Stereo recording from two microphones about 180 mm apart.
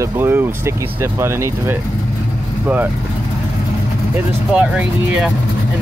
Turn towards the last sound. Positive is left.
turn(degrees=-5)  # may be behind; listen again after turning